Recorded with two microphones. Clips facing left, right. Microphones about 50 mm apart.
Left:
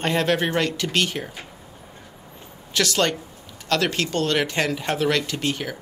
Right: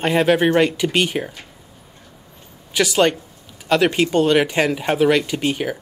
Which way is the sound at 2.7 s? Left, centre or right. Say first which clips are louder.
Right 5 dB; centre.